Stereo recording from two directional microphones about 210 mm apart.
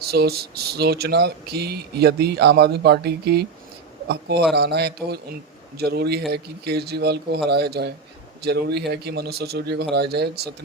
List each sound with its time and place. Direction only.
0.0 s speech: 50° right (ahead or behind)